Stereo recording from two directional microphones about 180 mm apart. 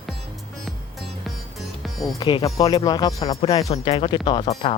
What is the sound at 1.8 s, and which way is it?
Music, centre (ahead or behind).